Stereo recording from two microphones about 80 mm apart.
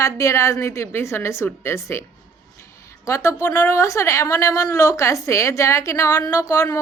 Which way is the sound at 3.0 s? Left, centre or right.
Left.